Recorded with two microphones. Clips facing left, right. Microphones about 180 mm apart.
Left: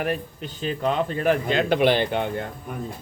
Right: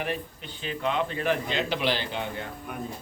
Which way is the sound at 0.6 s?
40° left (ahead or behind).